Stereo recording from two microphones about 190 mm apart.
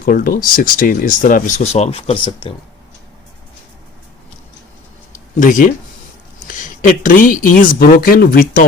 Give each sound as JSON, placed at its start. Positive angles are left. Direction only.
{"t": 0.0, "sound": "speech", "side_deg": 45}
{"t": 5.4, "sound": "speech", "side_deg": 45}
{"t": 6.8, "sound": "speech", "side_deg": 45}